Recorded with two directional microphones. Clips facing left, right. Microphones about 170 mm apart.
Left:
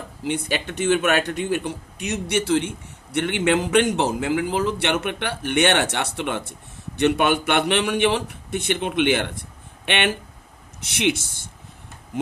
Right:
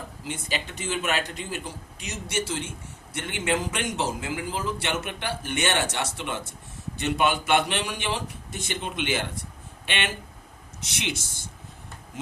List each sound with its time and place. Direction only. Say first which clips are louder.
0.3 s speech: left 8 dB; 65° left (ahead or behind)